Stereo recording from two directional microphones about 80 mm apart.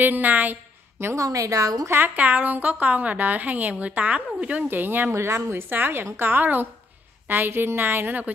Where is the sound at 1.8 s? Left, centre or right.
Right.